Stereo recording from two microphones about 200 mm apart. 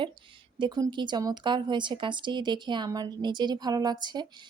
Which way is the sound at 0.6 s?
20° right (ahead or behind).